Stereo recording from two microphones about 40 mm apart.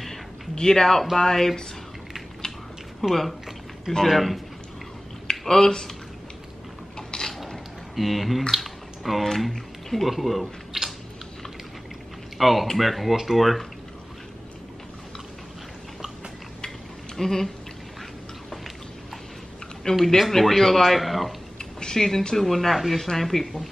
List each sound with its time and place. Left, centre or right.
0.6 s speech: centre
3.0 s speech: centre
5.3 s speech: centre
7.0 s mechanisms: centre
7.9 s speech: centre
12.4 s speech: centre
17.2 s speech: centre
19.9 s speech: left
20.2 s speech: centre
21.5 s speech: centre